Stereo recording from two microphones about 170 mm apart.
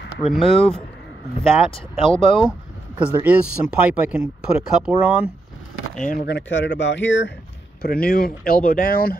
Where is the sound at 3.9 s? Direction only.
5° right (ahead or behind).